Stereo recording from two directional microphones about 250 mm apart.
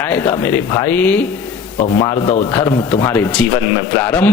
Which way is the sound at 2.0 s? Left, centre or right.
Centre.